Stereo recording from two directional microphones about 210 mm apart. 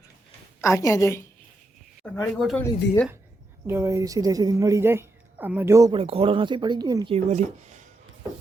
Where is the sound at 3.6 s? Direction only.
15° right (ahead or behind).